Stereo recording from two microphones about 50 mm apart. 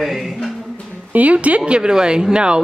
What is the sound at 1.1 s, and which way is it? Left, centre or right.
Speech, right.